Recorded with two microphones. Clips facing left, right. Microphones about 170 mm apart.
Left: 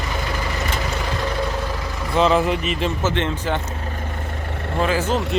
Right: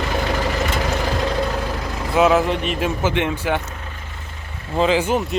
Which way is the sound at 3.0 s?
10° right (ahead or behind).